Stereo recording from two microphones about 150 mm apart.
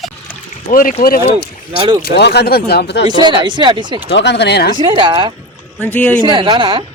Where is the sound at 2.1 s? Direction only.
90° left.